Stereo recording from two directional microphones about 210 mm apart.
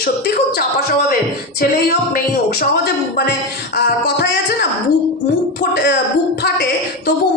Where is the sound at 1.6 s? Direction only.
45° left (ahead or behind).